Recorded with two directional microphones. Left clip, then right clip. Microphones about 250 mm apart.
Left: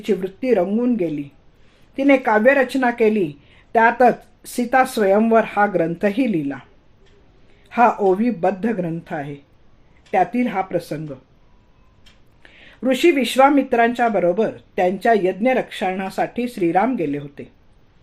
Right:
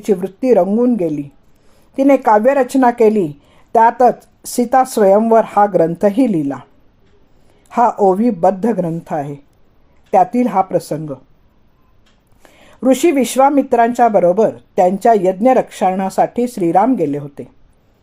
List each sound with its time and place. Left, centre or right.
0.0 s speech: right
7.7 s speech: right
12.4 s speech: right